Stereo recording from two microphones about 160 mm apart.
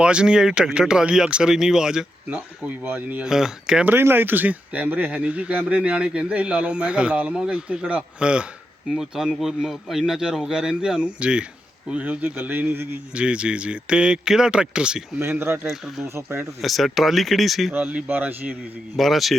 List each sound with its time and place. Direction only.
0.0 s speech: 5° right (ahead or behind)
15.7 s speech: centre (ahead or behind)
16.0 s speech: 15° right (ahead or behind)
16.6 s speech: centre (ahead or behind)
17.7 s speech: 10° right (ahead or behind)
18.9 s speech: centre (ahead or behind)